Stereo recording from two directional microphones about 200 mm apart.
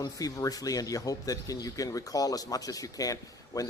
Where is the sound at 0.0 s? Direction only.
20° left (ahead or behind).